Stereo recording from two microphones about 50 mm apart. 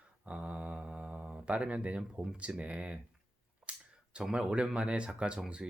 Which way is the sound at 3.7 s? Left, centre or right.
Right.